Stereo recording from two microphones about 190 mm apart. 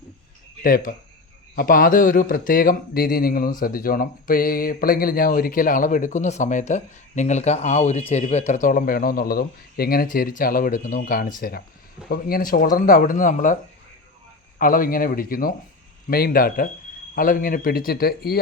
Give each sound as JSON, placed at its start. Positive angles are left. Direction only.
{"t": 0.6, "sound": "speech", "side_deg": 45}
{"t": 14.6, "sound": "speech", "side_deg": 50}